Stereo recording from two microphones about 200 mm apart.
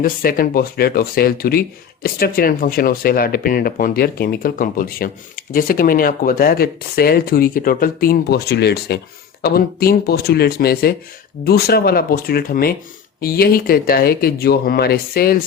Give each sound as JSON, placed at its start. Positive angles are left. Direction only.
{"t": 0.0, "sound": "speech", "side_deg": 45}